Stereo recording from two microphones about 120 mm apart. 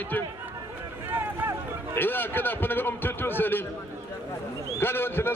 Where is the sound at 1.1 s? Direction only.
15° right (ahead or behind).